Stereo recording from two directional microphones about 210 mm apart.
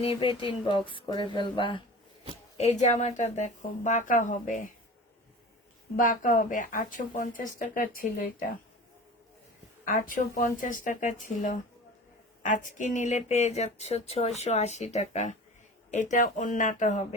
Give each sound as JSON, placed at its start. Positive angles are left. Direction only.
{"t": 0.0, "sound": "speech", "side_deg": 25}
{"t": 6.0, "sound": "speech", "side_deg": 40}
{"t": 9.8, "sound": "speech", "side_deg": 40}